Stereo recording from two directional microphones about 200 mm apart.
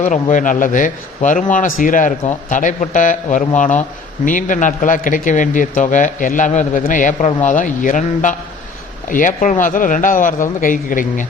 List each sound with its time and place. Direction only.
0.0 s a man's voice: 40° left (ahead or behind)